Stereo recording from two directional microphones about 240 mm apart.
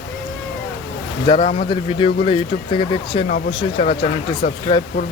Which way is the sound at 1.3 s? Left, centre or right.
Left.